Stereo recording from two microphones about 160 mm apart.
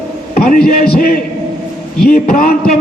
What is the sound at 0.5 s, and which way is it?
A man's voice, 60° left (ahead or behind).